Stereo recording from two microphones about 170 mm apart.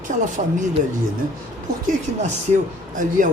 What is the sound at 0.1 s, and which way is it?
Speech, 45° right (ahead or behind).